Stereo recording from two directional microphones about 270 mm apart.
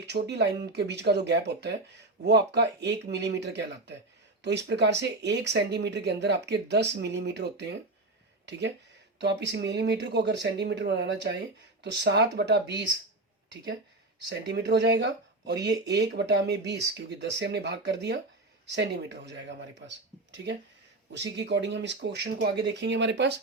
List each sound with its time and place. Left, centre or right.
0.1 s speech: right
14.5 s speech: right